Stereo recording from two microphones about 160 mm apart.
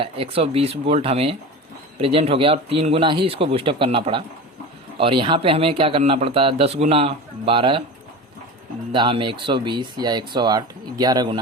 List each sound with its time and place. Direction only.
0.0 s speech: 35° right (ahead or behind)
8.9 s speech: 30° right (ahead or behind)